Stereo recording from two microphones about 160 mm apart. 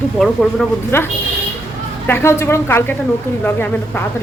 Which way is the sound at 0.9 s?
15° left (ahead or behind).